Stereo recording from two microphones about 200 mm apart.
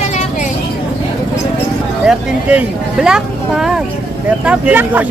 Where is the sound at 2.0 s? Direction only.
5° right (ahead or behind).